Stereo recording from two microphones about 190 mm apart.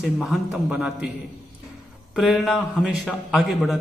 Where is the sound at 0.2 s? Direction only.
5° right (ahead or behind).